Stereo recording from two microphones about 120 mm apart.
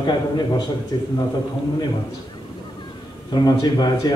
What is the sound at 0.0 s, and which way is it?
A man's voice, 35° left (ahead or behind).